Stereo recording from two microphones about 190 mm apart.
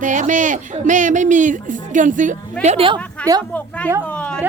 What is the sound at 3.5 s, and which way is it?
Speech, 5° left (ahead or behind).